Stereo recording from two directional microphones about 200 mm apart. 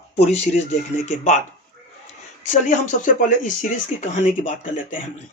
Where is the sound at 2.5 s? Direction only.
40° left (ahead or behind).